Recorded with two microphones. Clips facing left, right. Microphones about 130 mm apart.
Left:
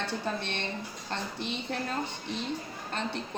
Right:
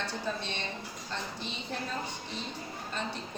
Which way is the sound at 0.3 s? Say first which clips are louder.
Left 3 dB; 60° left (ahead or behind).